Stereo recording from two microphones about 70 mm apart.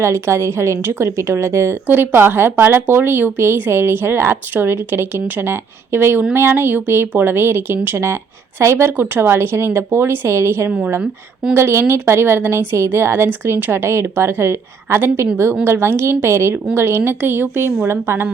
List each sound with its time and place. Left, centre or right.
0.0 s a woman's voice: right
10.7 s a woman's voice: centre
11.5 s a woman's voice: right